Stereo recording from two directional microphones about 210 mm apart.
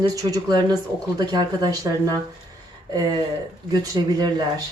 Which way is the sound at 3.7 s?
20° right (ahead or behind).